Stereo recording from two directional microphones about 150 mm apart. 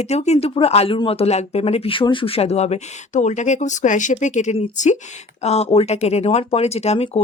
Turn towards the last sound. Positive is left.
turn(degrees=45)  # may be behind; listen again after turning